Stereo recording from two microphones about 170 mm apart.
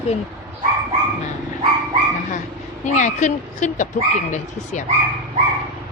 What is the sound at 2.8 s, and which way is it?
A woman's voice, 45° left (ahead or behind).